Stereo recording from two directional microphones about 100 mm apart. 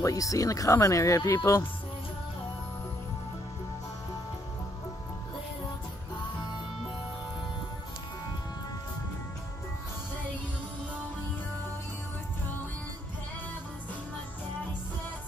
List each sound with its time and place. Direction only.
0.0 s speech: 35° left (ahead or behind)